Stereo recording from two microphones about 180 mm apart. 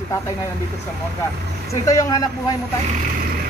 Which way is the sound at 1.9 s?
20° left (ahead or behind).